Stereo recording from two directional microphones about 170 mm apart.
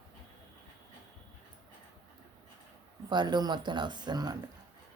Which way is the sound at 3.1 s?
25° right (ahead or behind).